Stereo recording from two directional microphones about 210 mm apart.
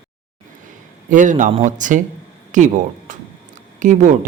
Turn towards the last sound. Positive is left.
turn(degrees=-35)  # may be behind; listen again after turning